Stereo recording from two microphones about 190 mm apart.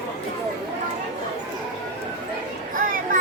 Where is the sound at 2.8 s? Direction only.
45° right (ahead or behind).